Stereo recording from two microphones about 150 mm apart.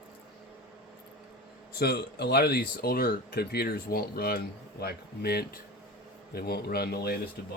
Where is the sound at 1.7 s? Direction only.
90° left.